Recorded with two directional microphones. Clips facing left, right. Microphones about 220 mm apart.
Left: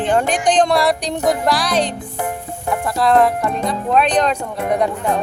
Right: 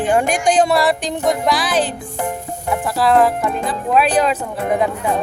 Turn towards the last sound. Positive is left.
turn(degrees=-5)  # may be behind; listen again after turning